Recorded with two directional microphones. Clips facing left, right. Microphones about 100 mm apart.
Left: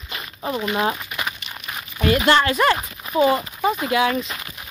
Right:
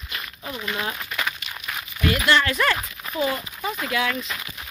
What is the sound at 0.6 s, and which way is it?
Speech, 25° left (ahead or behind).